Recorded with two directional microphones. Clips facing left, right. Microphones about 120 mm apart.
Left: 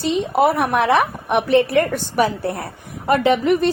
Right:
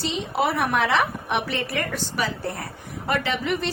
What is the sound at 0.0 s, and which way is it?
A woman's voice, 50° left (ahead or behind).